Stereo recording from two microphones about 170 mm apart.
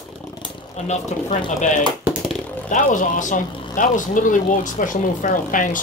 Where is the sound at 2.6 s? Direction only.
50° left (ahead or behind).